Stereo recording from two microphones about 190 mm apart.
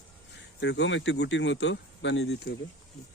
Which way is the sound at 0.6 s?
75° left (ahead or behind).